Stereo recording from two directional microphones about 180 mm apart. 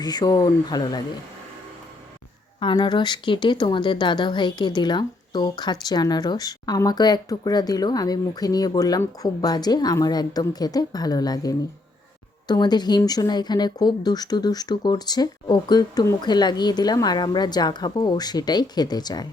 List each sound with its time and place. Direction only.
0.0 s speech: 20° left (ahead or behind)
2.6 s speech: 25° left (ahead or behind)